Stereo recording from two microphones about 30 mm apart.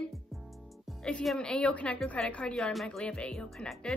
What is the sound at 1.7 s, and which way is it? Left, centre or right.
Speech, left.